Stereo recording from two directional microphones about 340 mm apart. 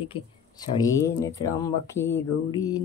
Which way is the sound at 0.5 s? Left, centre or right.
Centre.